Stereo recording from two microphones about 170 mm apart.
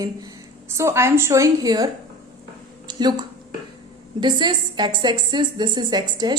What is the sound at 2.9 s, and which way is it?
A woman's voice, 25° right (ahead or behind).